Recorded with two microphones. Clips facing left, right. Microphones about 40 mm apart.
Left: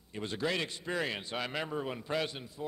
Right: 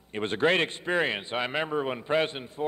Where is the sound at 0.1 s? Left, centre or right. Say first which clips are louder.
Right 9 dB; right.